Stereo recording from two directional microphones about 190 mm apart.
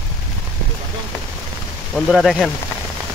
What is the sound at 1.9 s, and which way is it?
Speech, centre (ahead or behind).